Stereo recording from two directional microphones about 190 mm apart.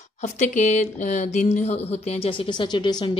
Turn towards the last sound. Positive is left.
turn(degrees=25)  # may be behind; listen again after turning